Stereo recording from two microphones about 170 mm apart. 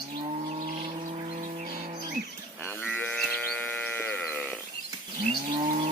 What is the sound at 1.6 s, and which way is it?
Cattle, 60° right (ahead or behind).